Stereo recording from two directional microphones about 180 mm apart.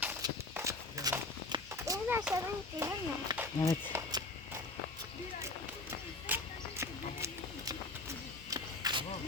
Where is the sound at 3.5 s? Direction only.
15° left (ahead or behind).